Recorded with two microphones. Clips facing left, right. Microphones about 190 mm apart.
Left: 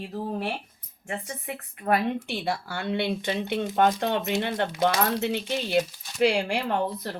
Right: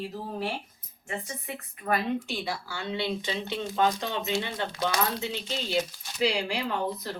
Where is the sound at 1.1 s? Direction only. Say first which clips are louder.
Left 2 dB; 55° left (ahead or behind).